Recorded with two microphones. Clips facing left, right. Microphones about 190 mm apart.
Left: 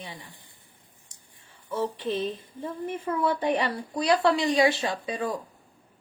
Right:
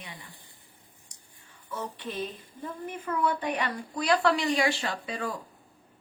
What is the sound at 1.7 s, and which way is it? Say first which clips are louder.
A woman's voice: left 7 dB; 25° left (ahead or behind).